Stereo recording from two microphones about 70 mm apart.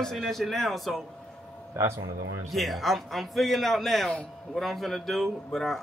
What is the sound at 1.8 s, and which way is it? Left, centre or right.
Speech, right.